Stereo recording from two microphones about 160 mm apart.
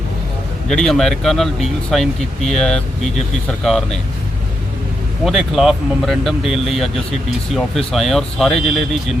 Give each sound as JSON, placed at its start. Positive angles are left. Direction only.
{"t": 0.7, "sound": "speech", "side_deg": 5}
{"t": 5.2, "sound": "speech", "side_deg": 0}
{"t": 7.9, "sound": "speech", "side_deg": 0}